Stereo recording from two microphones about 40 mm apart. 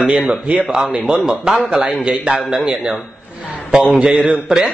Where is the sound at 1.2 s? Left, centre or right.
Centre.